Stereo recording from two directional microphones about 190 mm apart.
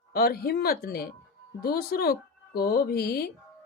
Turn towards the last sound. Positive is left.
turn(degrees=55)  # may be behind; listen again after turning